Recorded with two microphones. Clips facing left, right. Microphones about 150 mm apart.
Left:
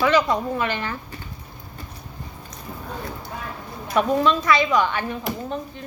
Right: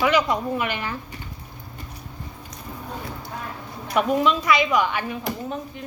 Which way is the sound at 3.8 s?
10° right (ahead or behind).